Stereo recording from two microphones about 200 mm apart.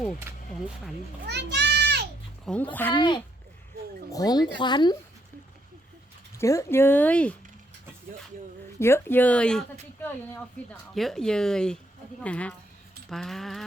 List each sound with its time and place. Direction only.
1.2 s a child's voice: 55° right (ahead or behind)
2.5 s speech: centre (ahead or behind)
2.9 s speech: 25° left (ahead or behind)
6.3 s speech: 15° left (ahead or behind)
8.8 s speech: 10° left (ahead or behind)
10.9 s speech: centre (ahead or behind)